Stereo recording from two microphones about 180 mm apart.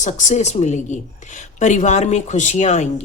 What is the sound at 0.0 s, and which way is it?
Speech, 40° left (ahead or behind).